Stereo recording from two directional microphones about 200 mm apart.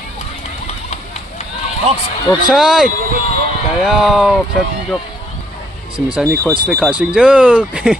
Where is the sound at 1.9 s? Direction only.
30° right (ahead or behind).